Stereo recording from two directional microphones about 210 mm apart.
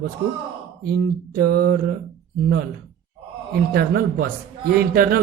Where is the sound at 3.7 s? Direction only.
45° right (ahead or behind).